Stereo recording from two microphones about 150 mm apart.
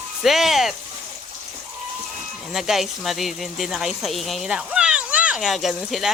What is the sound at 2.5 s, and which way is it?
Speech, centre (ahead or behind).